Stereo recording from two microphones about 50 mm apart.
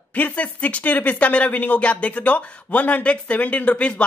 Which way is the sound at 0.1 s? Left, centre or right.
Left.